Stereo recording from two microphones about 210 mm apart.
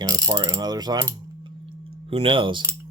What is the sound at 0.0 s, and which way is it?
Ratchet, 15° right (ahead or behind).